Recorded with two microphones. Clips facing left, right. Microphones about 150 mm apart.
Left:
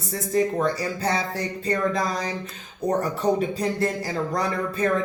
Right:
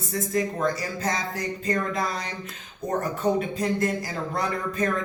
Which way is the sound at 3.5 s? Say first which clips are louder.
Left 1 dB; 35° left (ahead or behind).